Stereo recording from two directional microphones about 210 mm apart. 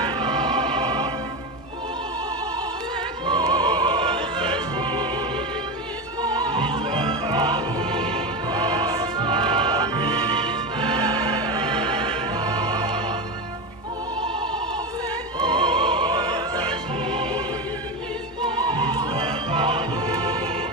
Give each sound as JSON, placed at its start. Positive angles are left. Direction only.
{"t": 0.0, "sound": "music", "side_deg": -20}
{"t": 3.2, "sound": "opera", "side_deg": -20}
{"t": 6.2, "sound": "music", "side_deg": -20}
{"t": 14.3, "sound": "music", "side_deg": -20}
{"t": 15.4, "sound": "opera", "side_deg": -20}
{"t": 18.4, "sound": "music", "side_deg": -20}